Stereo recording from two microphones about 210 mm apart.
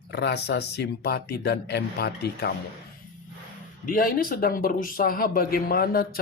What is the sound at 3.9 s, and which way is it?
Speech, 40° left (ahead or behind).